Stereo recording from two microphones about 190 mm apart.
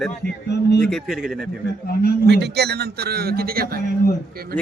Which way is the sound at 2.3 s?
65° right (ahead or behind).